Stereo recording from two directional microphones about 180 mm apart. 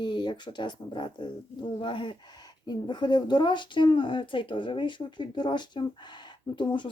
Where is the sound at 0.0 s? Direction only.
25° left (ahead or behind).